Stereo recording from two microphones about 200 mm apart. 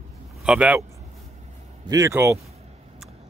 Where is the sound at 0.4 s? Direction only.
5° right (ahead or behind).